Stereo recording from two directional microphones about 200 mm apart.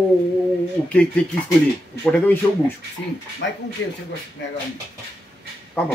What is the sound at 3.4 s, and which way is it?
Speech, 65° left (ahead or behind).